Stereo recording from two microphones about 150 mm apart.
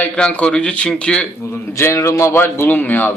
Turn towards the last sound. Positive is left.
turn(degrees=10)  # may be behind; listen again after turning